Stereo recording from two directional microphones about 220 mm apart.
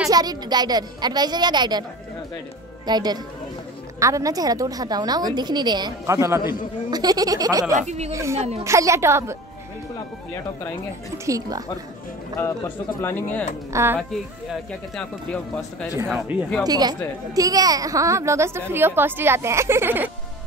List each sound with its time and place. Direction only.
0.1 s a woman's voice: 15° right (ahead or behind)
2.9 s a woman's voice: 20° right (ahead or behind)
7.7 s speech: 30° right (ahead or behind)
8.1 s a woman's voice: 15° right (ahead or behind)
8.4 s a woman's voice: 30° right (ahead or behind)
8.6 s a woman's voice: 15° right (ahead or behind)
11.2 s a woman's voice: 15° right (ahead or behind)
12.4 s speech: 10° left (ahead or behind)
16.6 s a woman's voice: 20° right (ahead or behind)